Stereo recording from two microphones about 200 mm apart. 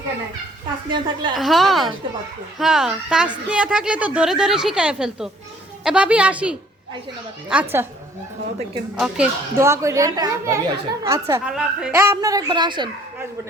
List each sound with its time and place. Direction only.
0.9 s a woman's voice: 20° right (ahead or behind)
1.4 s a woman's voice: centre (ahead or behind)
9.0 s a woman's voice: 5° right (ahead or behind)
11.4 s a woman's voice: 5° right (ahead or behind); by 12.9 s 20° right (ahead or behind)